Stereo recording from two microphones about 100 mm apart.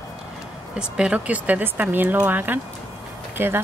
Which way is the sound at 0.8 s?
10° right (ahead or behind).